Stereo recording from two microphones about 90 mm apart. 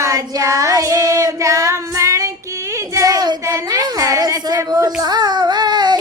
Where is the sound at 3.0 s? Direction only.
45° right (ahead or behind).